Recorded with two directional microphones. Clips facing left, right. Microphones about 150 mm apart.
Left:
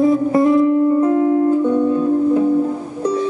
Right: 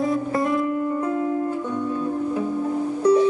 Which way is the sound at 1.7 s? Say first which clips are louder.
Left 10 dB; 55° left (ahead or behind).